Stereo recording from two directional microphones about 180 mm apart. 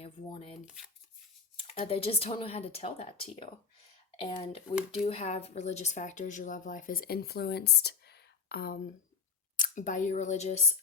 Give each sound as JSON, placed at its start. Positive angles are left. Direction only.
{"t": 0.0, "sound": "speech", "side_deg": 35}
{"t": 0.6, "sound": "speech", "side_deg": -5}
{"t": 1.6, "sound": "speech", "side_deg": 35}
{"t": 9.6, "sound": "speech", "side_deg": 45}